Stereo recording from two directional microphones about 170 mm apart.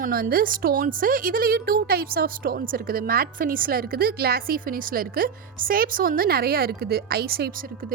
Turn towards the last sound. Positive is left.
turn(degrees=-65)  # may be behind; listen again after turning